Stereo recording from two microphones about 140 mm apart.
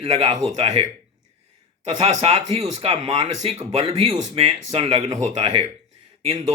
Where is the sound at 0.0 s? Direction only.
45° right (ahead or behind).